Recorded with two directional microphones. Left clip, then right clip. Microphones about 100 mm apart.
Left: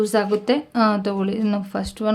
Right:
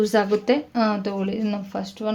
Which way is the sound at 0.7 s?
30° left (ahead or behind).